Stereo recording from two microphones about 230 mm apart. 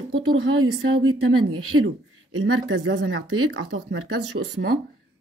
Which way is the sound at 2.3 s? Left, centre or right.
Right.